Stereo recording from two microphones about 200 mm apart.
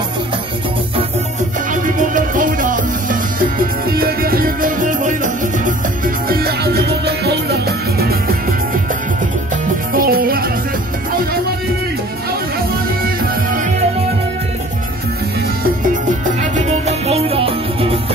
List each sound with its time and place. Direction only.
1.7 s music: 40° right (ahead or behind)
9.9 s music: 45° right (ahead or behind)
16.5 s music: 30° right (ahead or behind)